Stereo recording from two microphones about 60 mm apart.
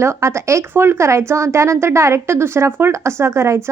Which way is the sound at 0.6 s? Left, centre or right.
Right.